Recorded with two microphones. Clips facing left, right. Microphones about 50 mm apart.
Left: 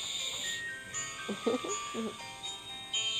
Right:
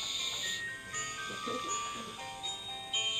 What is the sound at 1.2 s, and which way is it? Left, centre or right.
Speech, centre.